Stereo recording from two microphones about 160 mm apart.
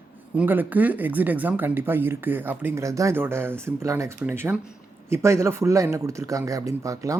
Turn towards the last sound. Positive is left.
turn(degrees=-20)  # may be behind; listen again after turning